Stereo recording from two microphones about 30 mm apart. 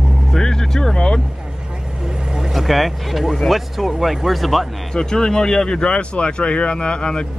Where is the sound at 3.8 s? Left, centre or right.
Centre.